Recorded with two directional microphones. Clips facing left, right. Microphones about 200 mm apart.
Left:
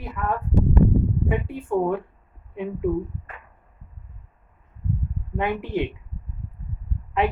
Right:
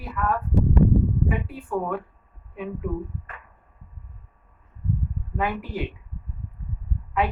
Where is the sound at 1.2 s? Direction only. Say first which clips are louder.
Left 3 dB; 25° left (ahead or behind).